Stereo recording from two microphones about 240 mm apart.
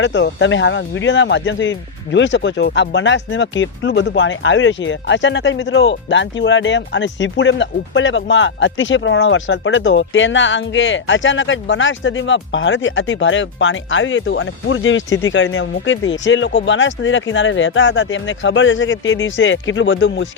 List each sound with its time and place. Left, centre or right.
0.0 s speech: left